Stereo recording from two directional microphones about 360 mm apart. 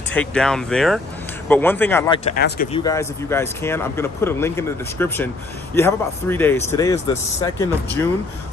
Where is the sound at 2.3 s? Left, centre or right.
Left.